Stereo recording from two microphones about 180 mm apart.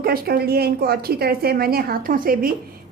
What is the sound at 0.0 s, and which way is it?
A woman's voice, 60° right (ahead or behind).